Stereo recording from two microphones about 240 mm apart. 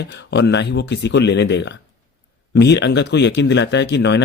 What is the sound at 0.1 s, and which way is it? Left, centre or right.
Speech, left.